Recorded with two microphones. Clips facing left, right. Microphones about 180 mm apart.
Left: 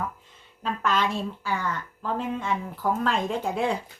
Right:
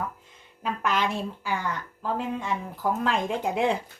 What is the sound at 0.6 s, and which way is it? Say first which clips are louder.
A woman's voice: left 1 dB; 15° right (ahead or behind).